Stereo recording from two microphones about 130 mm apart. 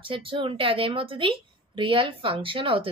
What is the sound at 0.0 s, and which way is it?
A woman's voice, 45° right (ahead or behind).